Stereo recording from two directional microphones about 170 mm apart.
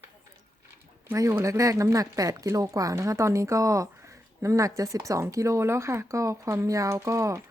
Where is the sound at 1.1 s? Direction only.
15° right (ahead or behind).